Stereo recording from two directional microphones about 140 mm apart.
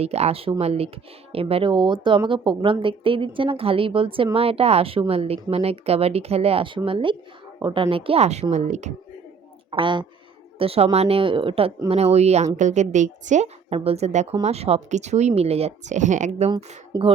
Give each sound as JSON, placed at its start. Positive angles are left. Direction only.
{"t": 0.0, "sound": "speech", "side_deg": -50}
{"t": 9.7, "sound": "a woman's voice", "side_deg": -35}
{"t": 16.9, "sound": "speech", "side_deg": -25}